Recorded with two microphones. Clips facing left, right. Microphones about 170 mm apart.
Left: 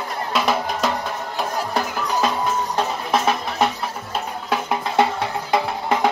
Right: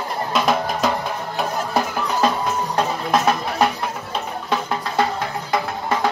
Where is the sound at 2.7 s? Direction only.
Centre (ahead or behind).